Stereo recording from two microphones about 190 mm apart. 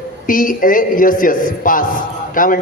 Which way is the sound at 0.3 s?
45° left (ahead or behind).